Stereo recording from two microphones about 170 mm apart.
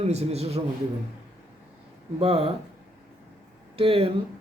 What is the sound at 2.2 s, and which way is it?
Speech, 35° right (ahead or behind).